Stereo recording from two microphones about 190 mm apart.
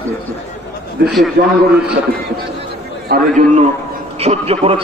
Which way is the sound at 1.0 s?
55° right (ahead or behind).